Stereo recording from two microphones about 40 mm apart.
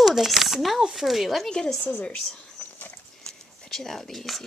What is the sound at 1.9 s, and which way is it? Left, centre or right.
Speech, left.